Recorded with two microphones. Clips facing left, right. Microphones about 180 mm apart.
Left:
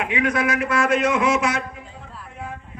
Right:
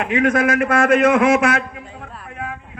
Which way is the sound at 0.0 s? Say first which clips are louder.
Right 5 dB; 45° right (ahead or behind).